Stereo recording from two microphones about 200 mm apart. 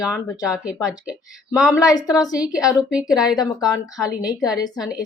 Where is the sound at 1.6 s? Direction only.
15° left (ahead or behind).